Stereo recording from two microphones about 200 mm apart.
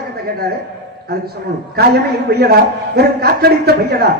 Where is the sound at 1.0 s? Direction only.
50° right (ahead or behind).